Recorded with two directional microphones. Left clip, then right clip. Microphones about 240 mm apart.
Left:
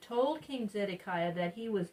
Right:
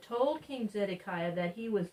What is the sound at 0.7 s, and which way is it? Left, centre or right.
Speech, left.